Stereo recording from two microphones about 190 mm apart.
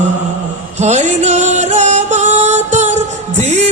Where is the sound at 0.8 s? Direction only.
35° right (ahead or behind).